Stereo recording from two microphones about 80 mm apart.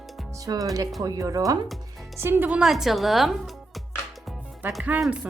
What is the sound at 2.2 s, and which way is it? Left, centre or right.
Speech, right.